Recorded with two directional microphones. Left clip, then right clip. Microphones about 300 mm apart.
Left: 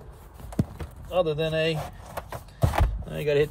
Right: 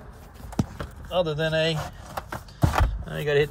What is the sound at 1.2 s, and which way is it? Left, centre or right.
Speech, centre.